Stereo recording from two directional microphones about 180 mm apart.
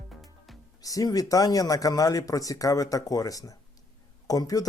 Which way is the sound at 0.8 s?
20° left (ahead or behind).